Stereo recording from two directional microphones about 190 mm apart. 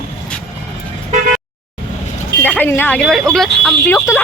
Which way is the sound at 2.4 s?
10° left (ahead or behind).